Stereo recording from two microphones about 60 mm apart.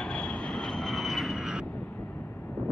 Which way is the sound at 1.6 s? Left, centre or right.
Left.